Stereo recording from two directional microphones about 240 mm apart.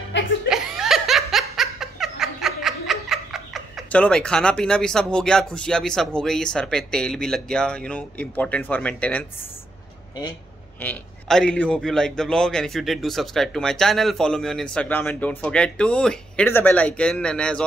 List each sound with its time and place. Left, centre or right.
0.1 s chuckle: left
0.5 s laughter: centre
10.8 s a man's voice: centre